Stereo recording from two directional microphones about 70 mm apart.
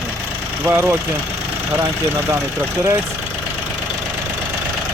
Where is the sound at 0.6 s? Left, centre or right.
Right.